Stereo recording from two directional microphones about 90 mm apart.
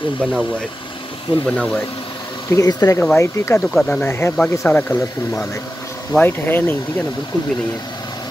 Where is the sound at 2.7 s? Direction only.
45° left (ahead or behind).